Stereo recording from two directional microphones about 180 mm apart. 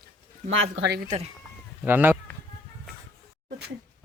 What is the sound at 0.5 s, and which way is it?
Speech, 90° right.